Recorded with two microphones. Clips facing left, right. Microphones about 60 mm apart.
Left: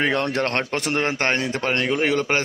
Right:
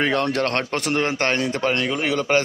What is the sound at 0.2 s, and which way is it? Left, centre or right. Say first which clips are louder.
Speech: right 1 dB; left.